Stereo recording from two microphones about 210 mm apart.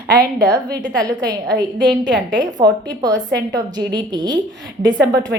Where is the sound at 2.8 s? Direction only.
20° right (ahead or behind).